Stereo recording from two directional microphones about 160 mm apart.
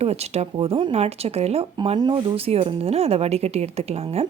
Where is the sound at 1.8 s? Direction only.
30° right (ahead or behind).